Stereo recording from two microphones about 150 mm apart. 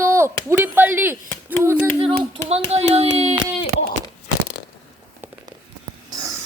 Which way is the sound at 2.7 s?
45° right (ahead or behind).